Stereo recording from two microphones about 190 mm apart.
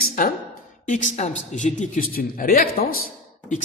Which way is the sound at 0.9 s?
40° left (ahead or behind).